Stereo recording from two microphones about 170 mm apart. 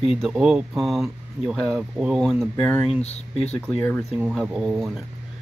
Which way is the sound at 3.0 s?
40° left (ahead or behind).